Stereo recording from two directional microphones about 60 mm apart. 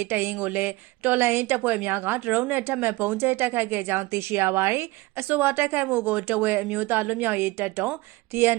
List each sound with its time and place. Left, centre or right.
0.0 s a woman's voice: right
5.3 s a woman's voice: right
8.3 s a sound: right